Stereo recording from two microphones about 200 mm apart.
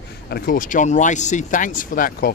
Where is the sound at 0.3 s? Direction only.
50° left (ahead or behind).